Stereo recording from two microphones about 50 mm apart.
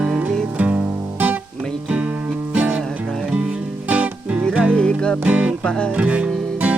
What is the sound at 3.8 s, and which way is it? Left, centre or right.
Music, right.